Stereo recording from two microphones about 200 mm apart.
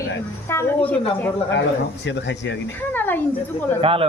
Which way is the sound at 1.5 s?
60° left (ahead or behind).